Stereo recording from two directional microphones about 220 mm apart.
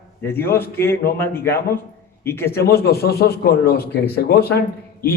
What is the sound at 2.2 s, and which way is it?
Speech, 10° left (ahead or behind).